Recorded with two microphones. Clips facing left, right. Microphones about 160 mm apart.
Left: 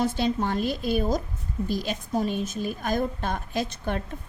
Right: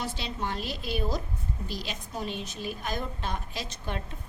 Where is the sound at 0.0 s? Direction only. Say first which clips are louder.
Left 9 dB; 45° left (ahead or behind).